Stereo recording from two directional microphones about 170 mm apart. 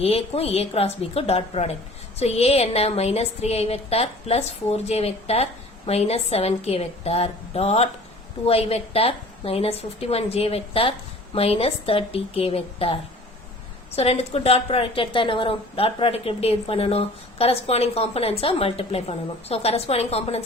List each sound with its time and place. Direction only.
0.0 s a woman's voice: 35° left (ahead or behind)